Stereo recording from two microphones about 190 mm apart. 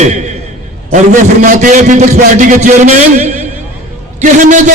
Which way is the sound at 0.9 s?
40° right (ahead or behind).